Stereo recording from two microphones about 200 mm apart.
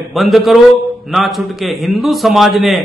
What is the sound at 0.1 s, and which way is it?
A man's voice, centre (ahead or behind).